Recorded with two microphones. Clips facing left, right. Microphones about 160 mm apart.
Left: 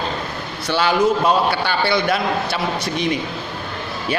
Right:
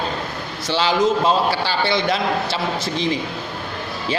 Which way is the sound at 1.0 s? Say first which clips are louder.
Even; 25° right (ahead or behind).